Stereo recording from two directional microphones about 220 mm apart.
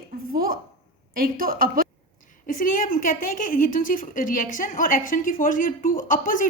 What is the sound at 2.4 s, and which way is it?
A woman's voice, 40° left (ahead or behind).